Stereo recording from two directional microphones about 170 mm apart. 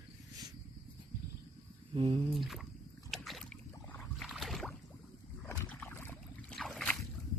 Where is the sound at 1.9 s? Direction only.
35° right (ahead or behind).